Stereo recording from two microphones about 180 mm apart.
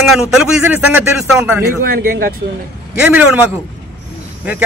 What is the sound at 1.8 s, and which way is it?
Speech, 55° right (ahead or behind).